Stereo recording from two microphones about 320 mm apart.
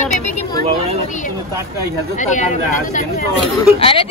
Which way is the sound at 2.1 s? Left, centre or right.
Left.